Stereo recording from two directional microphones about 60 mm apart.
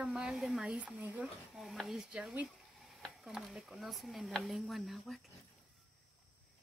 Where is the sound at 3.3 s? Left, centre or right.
Centre.